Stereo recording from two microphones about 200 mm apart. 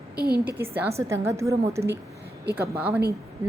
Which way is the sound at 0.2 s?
50° right (ahead or behind).